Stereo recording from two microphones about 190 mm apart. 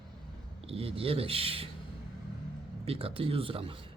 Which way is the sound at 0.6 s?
30° right (ahead or behind).